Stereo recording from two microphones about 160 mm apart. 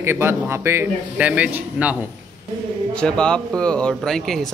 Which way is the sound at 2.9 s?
5° left (ahead or behind).